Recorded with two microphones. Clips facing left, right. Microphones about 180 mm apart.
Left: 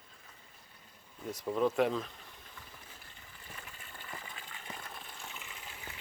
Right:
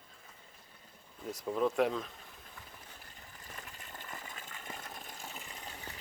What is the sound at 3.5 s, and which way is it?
Water, 40° right (ahead or behind).